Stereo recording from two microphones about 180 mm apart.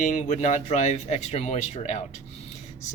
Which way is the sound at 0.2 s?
40° left (ahead or behind).